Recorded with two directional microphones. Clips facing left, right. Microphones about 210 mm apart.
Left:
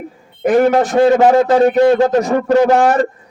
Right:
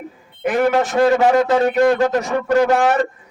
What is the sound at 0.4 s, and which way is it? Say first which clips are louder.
Speech: left 5 dB; 40° left (ahead or behind).